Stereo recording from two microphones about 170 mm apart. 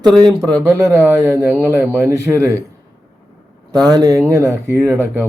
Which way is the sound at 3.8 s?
20° right (ahead or behind).